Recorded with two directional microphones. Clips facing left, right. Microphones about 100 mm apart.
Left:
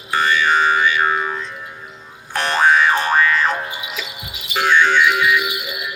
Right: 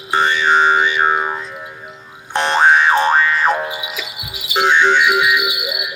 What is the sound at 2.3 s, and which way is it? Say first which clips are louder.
Boing: right 3 dB; 25° right (ahead or behind).